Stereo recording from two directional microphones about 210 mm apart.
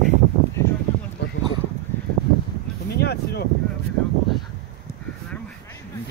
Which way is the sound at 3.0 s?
50° left (ahead or behind).